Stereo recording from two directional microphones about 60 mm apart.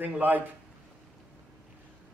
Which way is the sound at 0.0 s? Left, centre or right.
Right.